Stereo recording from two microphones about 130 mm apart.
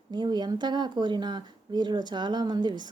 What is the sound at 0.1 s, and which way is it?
Speech, 35° right (ahead or behind).